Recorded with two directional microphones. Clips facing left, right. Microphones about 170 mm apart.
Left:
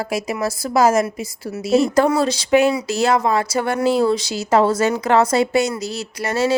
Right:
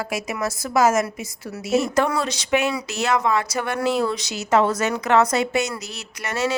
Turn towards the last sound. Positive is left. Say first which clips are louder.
# left 5 dB
turn(degrees=30)  # may be behind; listen again after turning